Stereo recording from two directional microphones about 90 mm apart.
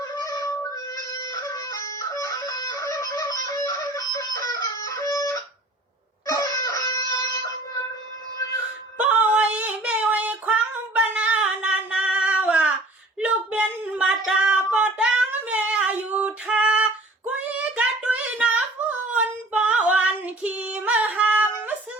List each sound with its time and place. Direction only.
0.2 s child singing: 40° left (ahead or behind)
1.2 s music: 40° left (ahead or behind)
6.2 s chicken: 35° left (ahead or behind)
9.0 s a sound: 15° right (ahead or behind)
10.1 s female singing: 15° right (ahead or behind)
13.1 s a sound: 15° right (ahead or behind)
14.3 s music: 10° right (ahead or behind)
15.3 s female singing: 15° right (ahead or behind)
17.7 s child singing: 15° right (ahead or behind)